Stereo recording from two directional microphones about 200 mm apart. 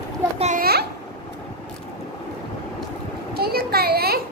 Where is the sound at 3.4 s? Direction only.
50° right (ahead or behind).